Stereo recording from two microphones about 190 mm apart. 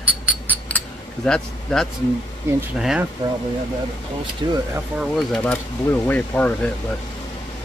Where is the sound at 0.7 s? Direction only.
5° left (ahead or behind).